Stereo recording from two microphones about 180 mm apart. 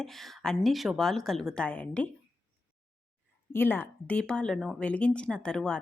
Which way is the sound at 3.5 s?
10° left (ahead or behind).